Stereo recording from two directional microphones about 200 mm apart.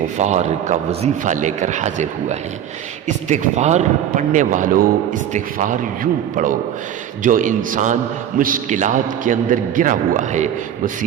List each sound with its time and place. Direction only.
0.2 s a man's voice: 35° right (ahead or behind)